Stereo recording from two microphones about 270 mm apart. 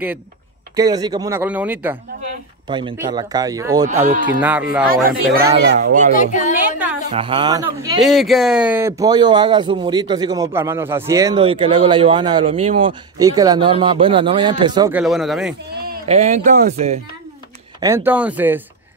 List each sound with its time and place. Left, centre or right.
0.7 s speech: centre
2.7 s speech: centre
4.0 s speech: right
4.4 s speech: centre
5.0 s speech: right
6.1 s speech: left
7.1 s speech: centre
8.0 s speech: centre
15.7 s speech: right
17.7 s speech: centre